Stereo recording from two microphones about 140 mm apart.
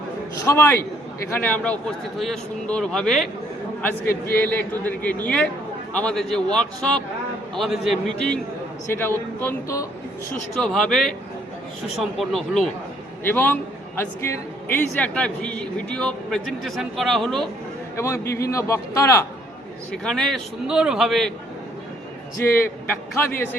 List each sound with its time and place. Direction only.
0.4 s a man's voice: 20° left (ahead or behind); by 3.2 s 5° left (ahead or behind)
4.0 s a man's voice: 90° left
4.5 s a man's voice: 10° left (ahead or behind)
8.9 s a man's voice: 15° left (ahead or behind)
10.5 s a man's voice: centre (ahead or behind)
13.2 s a man's voice: 15° left (ahead or behind)
17.9 s a man's voice: 20° left (ahead or behind)
19.9 s a man's voice: 5° left (ahead or behind)
22.4 s a man's voice: 15° left (ahead or behind)